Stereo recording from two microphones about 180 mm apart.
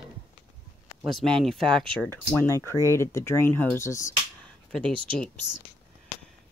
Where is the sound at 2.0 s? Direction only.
15° left (ahead or behind).